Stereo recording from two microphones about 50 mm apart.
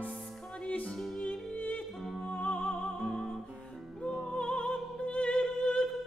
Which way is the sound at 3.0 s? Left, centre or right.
Centre.